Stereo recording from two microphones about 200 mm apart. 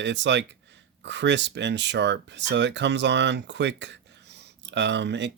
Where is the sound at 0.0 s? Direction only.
60° right (ahead or behind).